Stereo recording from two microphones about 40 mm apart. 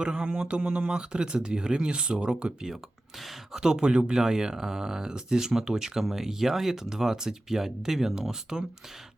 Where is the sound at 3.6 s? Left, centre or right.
Right.